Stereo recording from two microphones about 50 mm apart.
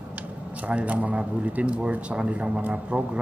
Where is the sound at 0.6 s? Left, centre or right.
Right.